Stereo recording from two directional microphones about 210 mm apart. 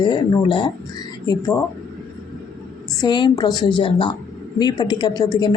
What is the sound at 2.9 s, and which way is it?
A woman's voice, 20° left (ahead or behind).